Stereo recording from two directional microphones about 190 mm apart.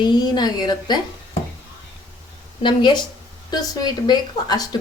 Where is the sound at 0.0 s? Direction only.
20° left (ahead or behind).